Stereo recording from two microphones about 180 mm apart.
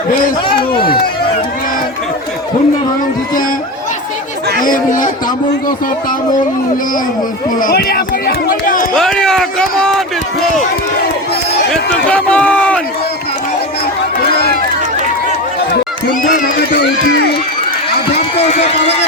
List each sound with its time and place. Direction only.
4.6 s speech: 50° left (ahead or behind)
7.6 s speech: 55° left (ahead or behind)
9.0 s a man's voice: 5° left (ahead or behind)
11.7 s a man's voice: 5° left (ahead or behind)